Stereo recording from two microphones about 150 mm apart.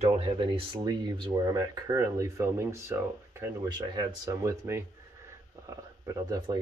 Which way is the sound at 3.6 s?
30° right (ahead or behind).